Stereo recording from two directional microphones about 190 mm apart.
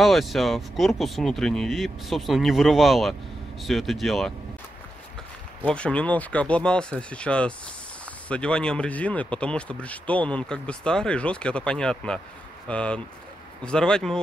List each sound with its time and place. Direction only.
0.0 s speech: centre (ahead or behind)
5.7 s speech: 5° left (ahead or behind)